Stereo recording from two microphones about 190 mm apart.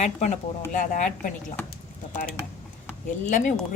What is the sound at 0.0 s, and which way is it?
A woman's voice, 35° left (ahead or behind).